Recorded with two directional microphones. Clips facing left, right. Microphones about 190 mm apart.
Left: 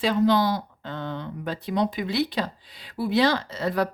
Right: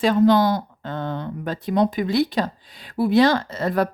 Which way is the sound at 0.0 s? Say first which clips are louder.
Right 5 dB; 50° right (ahead or behind).